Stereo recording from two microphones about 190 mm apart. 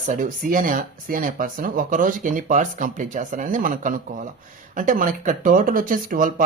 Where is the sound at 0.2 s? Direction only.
45° right (ahead or behind).